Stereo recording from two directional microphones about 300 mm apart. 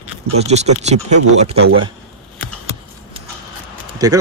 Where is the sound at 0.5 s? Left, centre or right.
Right.